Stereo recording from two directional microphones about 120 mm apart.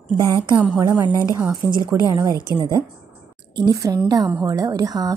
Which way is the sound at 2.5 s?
30° right (ahead or behind).